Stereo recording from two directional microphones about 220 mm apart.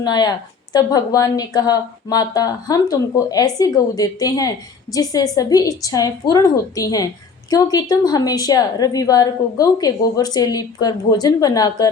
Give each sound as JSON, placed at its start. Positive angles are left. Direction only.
{"t": 0.0, "sound": "a woman's voice", "side_deg": 20}